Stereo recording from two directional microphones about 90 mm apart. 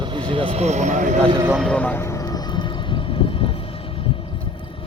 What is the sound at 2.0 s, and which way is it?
Vehicle, 35° left (ahead or behind).